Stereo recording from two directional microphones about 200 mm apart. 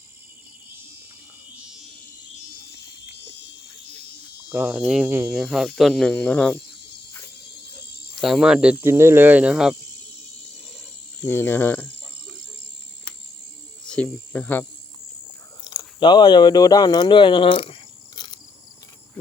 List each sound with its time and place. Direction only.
1.5 s a sound: 5° right (ahead or behind)
4.4 s speech: 10° right (ahead or behind)
8.1 s speech: centre (ahead or behind)
11.2 s speech: 10° left (ahead or behind)
13.8 s speech: 5° left (ahead or behind)
15.6 s speech: 20° left (ahead or behind)